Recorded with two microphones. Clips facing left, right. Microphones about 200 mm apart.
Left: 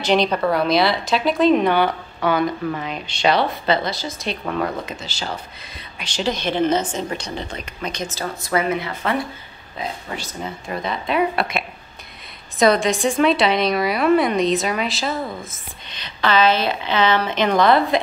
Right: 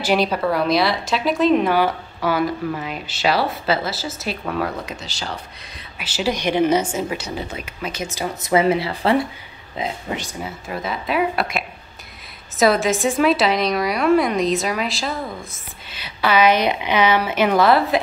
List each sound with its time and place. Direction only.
0.0 s a woman's voice: 5° right (ahead or behind)
10.4 s a woman's voice: 5° right (ahead or behind)